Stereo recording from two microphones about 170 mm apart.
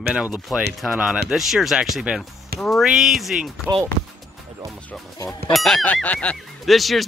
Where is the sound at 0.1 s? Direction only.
5° right (ahead or behind).